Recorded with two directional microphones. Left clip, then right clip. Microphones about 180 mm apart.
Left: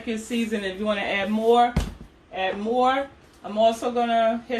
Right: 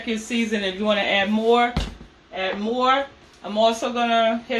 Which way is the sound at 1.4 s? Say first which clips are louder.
Left 4 dB; centre (ahead or behind).